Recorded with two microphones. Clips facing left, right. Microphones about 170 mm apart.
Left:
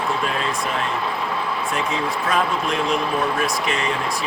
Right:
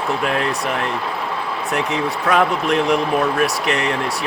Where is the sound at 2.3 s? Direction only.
70° right (ahead or behind).